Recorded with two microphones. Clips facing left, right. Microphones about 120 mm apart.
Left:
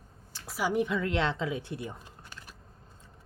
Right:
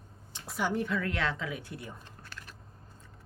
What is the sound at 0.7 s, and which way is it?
Speech, 20° left (ahead or behind).